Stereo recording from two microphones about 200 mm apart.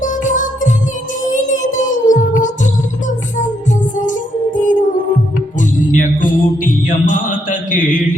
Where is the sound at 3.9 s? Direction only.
40° left (ahead or behind).